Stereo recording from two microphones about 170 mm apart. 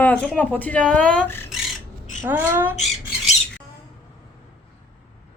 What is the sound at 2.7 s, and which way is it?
Squawk, 40° left (ahead or behind).